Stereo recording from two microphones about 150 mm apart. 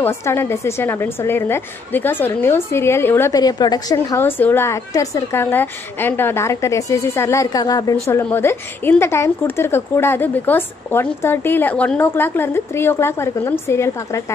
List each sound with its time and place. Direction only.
0.0 s a woman's voice: 15° left (ahead or behind)